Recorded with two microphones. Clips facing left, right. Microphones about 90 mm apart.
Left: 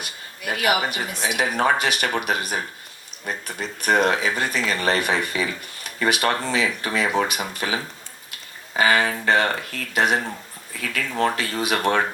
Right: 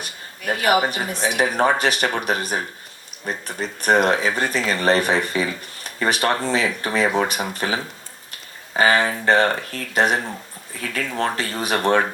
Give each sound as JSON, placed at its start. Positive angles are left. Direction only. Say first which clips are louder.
{"t": 0.0, "sound": "speech", "louder": "right 2 dB", "side_deg": -35}
{"t": 8.7, "sound": "speech", "louder": "right 2 dB", "side_deg": -35}